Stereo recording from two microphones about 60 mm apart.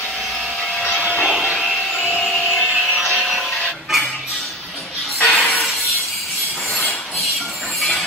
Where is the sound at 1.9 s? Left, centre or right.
Centre.